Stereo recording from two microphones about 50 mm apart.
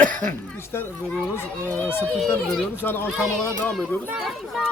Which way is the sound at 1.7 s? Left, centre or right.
Left.